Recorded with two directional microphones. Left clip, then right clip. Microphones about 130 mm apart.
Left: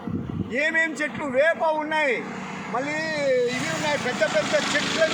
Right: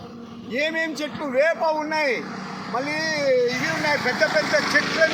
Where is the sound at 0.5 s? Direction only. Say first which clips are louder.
Left 1 dB; 10° left (ahead or behind).